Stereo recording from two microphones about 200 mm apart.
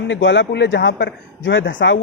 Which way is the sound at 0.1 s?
65° left (ahead or behind).